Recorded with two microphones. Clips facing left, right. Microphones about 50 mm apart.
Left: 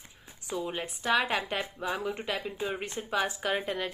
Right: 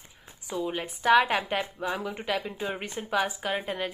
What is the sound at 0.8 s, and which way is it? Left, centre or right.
A woman's voice, right.